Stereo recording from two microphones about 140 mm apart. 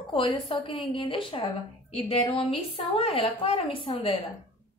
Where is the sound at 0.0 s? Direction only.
40° left (ahead or behind).